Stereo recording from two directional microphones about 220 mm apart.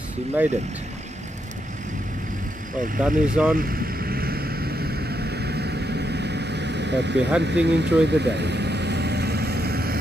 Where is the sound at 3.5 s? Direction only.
40° right (ahead or behind).